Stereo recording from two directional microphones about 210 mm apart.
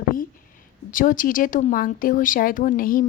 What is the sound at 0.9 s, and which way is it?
Speech, 40° left (ahead or behind).